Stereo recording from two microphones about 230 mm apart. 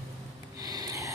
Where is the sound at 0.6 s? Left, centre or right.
Centre.